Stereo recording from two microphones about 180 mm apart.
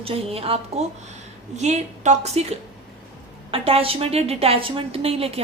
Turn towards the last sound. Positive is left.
turn(degrees=-35)  # may be behind; listen again after turning